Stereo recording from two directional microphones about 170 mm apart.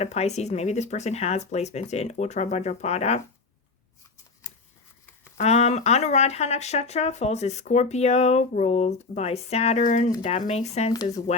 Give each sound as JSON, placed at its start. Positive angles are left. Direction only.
{"t": 0.0, "sound": "speech", "side_deg": 40}
{"t": 5.4, "sound": "speech", "side_deg": 40}